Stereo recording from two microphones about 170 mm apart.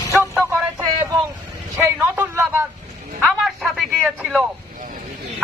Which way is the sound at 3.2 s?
Centre (ahead or behind).